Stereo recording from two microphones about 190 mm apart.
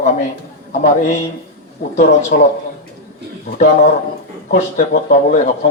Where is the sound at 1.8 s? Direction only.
50° left (ahead or behind).